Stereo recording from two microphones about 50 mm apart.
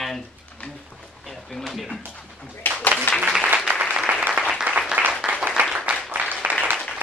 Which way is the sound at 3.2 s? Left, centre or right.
Centre.